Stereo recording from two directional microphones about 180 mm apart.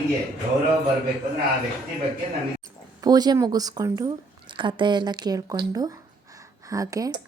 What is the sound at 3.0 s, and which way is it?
Speech, 20° right (ahead or behind).